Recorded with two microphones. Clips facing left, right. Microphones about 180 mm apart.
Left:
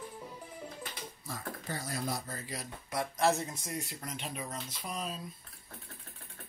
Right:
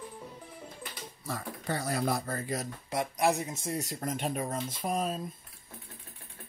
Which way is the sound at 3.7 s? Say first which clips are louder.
Right 7 dB; 45° right (ahead or behind).